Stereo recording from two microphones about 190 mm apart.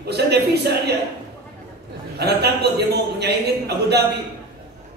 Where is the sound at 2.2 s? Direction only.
60° right (ahead or behind).